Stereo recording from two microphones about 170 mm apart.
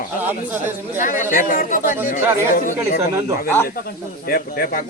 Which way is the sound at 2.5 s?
50° left (ahead or behind).